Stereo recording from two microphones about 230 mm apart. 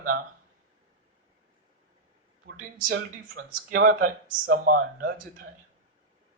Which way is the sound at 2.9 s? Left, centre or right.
Right.